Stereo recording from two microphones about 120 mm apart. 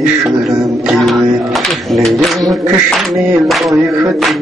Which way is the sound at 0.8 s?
Centre (ahead or behind).